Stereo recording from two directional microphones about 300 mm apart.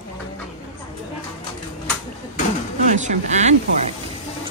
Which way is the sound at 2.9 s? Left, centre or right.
Right.